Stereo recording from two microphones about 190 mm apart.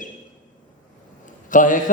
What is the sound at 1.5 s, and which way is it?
Speech, 45° left (ahead or behind).